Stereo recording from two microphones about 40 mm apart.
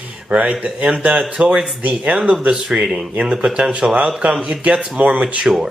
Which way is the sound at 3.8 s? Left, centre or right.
Right.